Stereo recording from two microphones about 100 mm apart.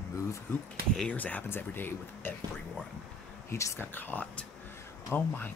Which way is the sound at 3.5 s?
30° left (ahead or behind).